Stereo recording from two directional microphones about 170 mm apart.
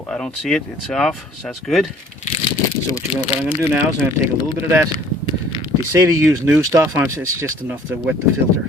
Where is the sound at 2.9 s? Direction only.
30° left (ahead or behind).